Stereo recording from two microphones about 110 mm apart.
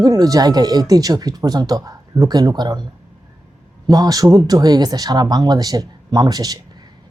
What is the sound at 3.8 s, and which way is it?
A woman's voice, 35° right (ahead or behind).